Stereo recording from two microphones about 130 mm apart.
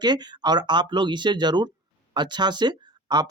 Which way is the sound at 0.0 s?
35° right (ahead or behind).